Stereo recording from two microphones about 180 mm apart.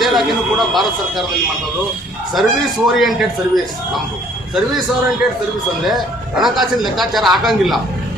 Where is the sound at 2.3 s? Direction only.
Centre (ahead or behind).